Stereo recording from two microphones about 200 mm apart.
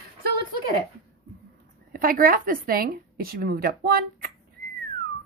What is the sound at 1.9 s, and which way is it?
A woman's voice, 45° right (ahead or behind).